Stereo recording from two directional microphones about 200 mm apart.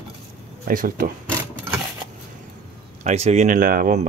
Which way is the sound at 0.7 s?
45° right (ahead or behind).